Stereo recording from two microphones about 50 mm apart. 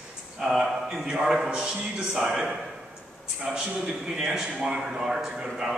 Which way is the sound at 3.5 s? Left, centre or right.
Centre.